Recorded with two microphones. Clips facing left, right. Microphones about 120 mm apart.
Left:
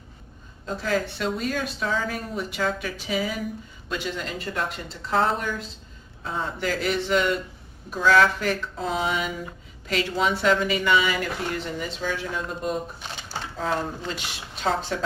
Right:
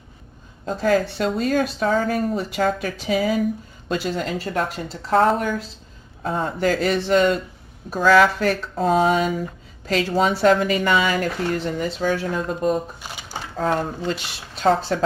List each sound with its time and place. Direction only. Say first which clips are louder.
0.6 s speech: right 6 dB; 45° right (ahead or behind)
13.0 s a sound: right 1 dB; 5° right (ahead or behind)
13.6 s speech: right 5 dB; 45° right (ahead or behind)